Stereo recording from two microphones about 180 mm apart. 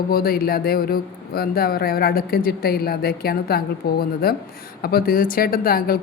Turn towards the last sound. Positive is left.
turn(degrees=55)  # may be behind; listen again after turning